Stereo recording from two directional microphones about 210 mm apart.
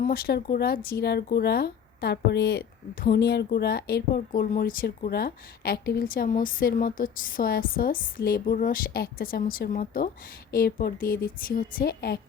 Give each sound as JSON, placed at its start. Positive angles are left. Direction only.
{"t": 0.0, "sound": "speech", "side_deg": 45}